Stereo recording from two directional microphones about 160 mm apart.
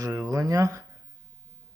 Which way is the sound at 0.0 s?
20° right (ahead or behind).